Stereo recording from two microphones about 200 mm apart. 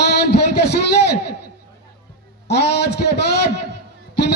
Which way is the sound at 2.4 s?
55° left (ahead or behind).